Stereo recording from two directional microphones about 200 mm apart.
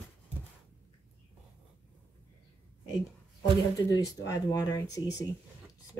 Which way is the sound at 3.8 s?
15° left (ahead or behind).